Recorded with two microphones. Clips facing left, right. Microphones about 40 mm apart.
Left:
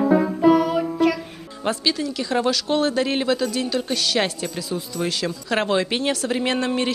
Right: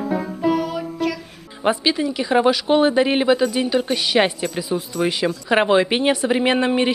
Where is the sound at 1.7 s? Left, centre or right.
Right.